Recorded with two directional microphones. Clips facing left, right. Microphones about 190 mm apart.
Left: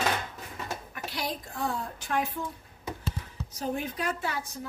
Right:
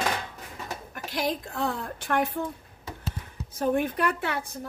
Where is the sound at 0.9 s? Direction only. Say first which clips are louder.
Right 4 dB; 45° right (ahead or behind).